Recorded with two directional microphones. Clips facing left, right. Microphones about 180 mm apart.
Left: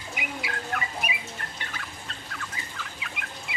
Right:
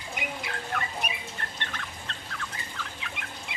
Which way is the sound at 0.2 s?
5° left (ahead or behind).